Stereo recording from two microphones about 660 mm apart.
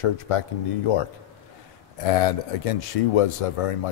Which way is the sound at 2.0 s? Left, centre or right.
Left.